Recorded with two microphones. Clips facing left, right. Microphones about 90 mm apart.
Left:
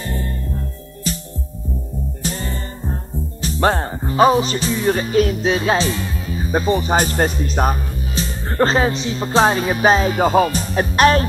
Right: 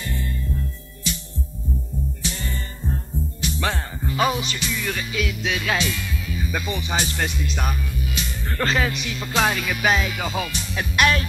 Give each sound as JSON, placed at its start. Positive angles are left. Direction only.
{"t": 0.0, "sound": "music", "side_deg": 40}
{"t": 2.2, "sound": "music", "side_deg": 40}